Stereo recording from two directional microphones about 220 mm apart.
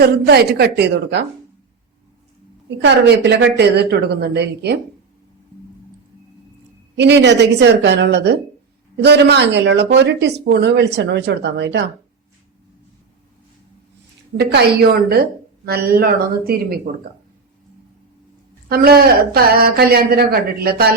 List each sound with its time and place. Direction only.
0.0 s speech: 45° right (ahead or behind)
2.6 s speech: 50° right (ahead or behind)
6.9 s speech: 50° right (ahead or behind)
14.3 s speech: 45° right (ahead or behind)
18.7 s speech: 45° right (ahead or behind)